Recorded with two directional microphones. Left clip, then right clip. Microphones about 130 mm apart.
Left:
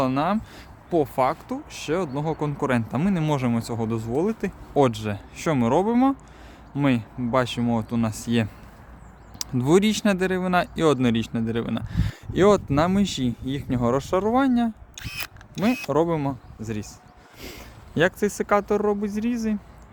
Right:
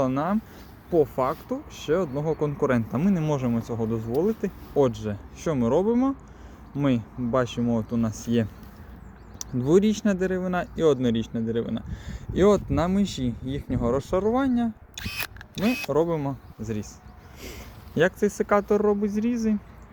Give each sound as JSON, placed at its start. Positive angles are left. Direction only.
{"t": 0.0, "sound": "speech", "side_deg": 25}
{"t": 3.0, "sound": "speech", "side_deg": 30}
{"t": 6.7, "sound": "speech", "side_deg": 30}
{"t": 15.9, "sound": "speech", "side_deg": 50}
{"t": 17.6, "sound": "speech", "side_deg": 30}